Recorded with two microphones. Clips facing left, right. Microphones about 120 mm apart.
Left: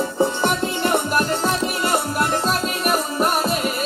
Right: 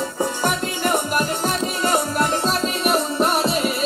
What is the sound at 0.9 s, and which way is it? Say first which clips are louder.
Music: even; 55° left (ahead or behind).